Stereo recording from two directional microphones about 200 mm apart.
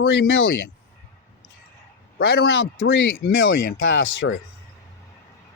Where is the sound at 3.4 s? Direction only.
70° left (ahead or behind).